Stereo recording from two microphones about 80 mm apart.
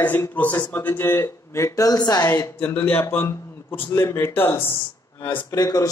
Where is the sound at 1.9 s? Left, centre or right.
Left.